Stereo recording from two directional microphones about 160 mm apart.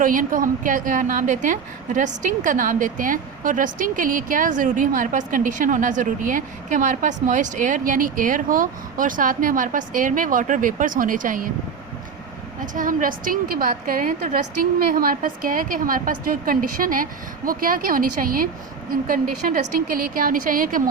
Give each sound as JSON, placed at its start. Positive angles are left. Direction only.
{"t": 0.0, "sound": "a woman's voice", "side_deg": -60}
{"t": 12.7, "sound": "a woman's voice", "side_deg": -55}